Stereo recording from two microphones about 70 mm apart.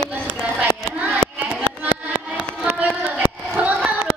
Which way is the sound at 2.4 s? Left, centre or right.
Centre.